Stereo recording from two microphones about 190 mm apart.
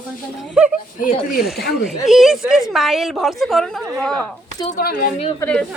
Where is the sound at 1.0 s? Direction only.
45° left (ahead or behind).